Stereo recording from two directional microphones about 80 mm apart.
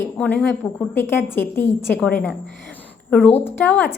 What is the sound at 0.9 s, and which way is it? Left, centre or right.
A woman's voice, left.